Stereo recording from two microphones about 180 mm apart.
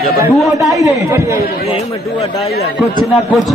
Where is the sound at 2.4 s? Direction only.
60° left (ahead or behind).